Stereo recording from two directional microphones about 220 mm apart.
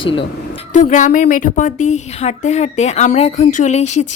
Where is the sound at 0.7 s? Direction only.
35° left (ahead or behind).